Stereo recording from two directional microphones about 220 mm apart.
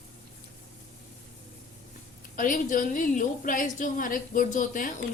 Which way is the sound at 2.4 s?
35° left (ahead or behind).